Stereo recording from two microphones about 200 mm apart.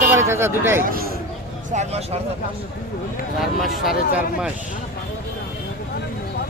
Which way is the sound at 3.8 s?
Centre (ahead or behind).